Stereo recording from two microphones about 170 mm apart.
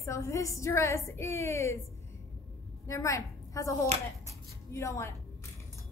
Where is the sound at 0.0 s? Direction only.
15° left (ahead or behind).